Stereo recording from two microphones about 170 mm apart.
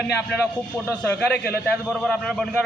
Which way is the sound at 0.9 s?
10° left (ahead or behind).